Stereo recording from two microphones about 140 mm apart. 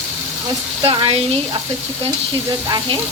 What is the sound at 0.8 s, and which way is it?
Speech, 40° right (ahead or behind).